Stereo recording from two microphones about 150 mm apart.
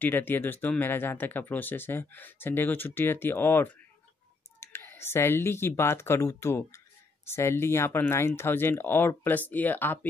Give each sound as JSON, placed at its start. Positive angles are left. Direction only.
{"t": 0.0, "sound": "speech", "side_deg": 15}